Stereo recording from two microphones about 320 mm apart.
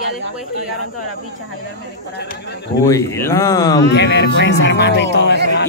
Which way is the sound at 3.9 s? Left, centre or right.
Left.